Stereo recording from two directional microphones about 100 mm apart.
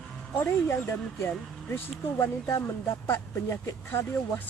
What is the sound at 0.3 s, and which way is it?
Speech, 25° left (ahead or behind).